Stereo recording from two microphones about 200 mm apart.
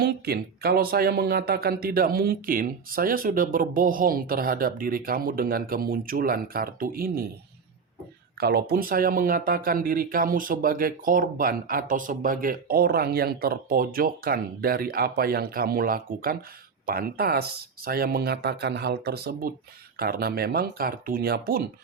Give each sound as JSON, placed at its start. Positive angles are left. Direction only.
{"t": 0.0, "sound": "speech", "side_deg": -50}
{"t": 8.4, "sound": "speech", "side_deg": -50}